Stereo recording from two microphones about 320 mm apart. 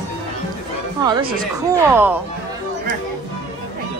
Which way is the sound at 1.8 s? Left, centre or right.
Centre.